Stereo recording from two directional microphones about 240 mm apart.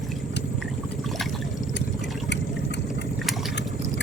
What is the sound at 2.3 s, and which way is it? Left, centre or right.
Water, left.